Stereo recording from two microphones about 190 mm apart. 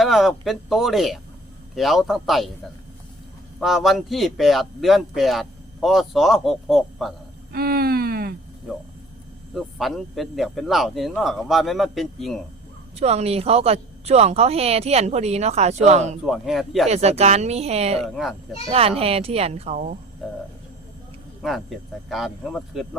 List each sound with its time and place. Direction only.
0.0 s a man's voice: centre (ahead or behind)
3.6 s a man's voice: centre (ahead or behind)
7.5 s a sound: 50° right (ahead or behind)
9.6 s a man's voice: centre (ahead or behind)
13.0 s speech: 35° right (ahead or behind)
16.2 s a man's voice: centre (ahead or behind)
16.9 s speech: 35° right (ahead or behind)
18.0 s a man's voice: centre (ahead or behind)
18.7 s speech: 30° right (ahead or behind)
20.2 s a man's voice: centre (ahead or behind)
21.4 s a man's voice: centre (ahead or behind)